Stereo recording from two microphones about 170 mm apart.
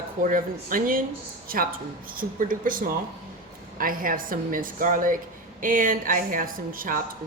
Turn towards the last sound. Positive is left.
turn(degrees=-55)  # may be behind; listen again after turning